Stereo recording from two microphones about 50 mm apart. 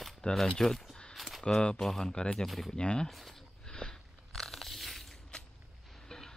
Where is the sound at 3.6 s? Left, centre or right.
Centre.